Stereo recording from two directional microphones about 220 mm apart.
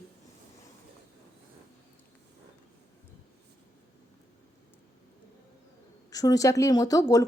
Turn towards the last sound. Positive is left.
turn(degrees=15)  # may be behind; listen again after turning